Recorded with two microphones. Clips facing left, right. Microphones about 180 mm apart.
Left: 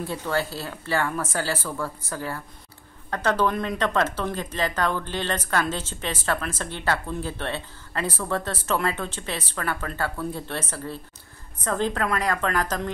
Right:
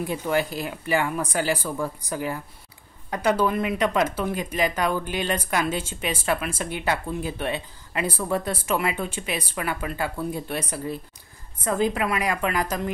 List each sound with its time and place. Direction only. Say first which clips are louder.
0.0 s speech: right 2 dB; 15° right (ahead or behind)